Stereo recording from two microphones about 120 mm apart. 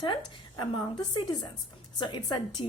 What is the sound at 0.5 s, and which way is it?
A woman's voice, 40° left (ahead or behind).